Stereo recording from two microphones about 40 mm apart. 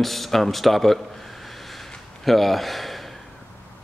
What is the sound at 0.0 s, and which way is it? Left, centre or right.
Speech, centre.